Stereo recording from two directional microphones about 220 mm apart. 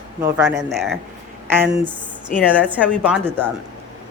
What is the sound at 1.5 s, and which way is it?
Speech, 10° right (ahead or behind).